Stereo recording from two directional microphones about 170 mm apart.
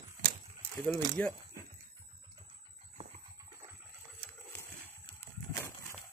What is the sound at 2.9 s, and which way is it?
Horse, 40° right (ahead or behind).